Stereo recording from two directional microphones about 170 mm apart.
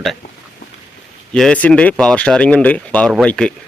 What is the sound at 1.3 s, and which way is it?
A man's voice, 5° left (ahead or behind).